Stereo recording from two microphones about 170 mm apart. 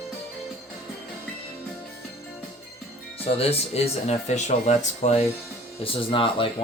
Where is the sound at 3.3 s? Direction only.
40° left (ahead or behind).